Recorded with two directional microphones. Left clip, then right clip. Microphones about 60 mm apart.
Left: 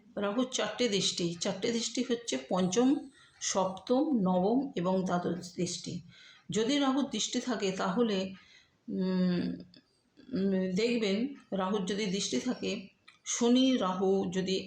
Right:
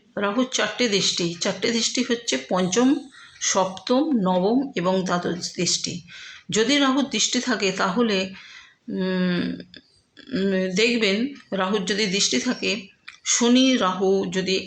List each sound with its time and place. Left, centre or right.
0.2 s speech: right